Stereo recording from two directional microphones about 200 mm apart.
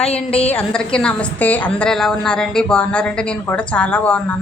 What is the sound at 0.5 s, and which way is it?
A woman's voice, 5° left (ahead or behind).